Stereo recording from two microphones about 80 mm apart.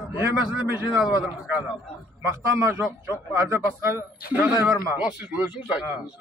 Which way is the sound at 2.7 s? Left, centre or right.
Right.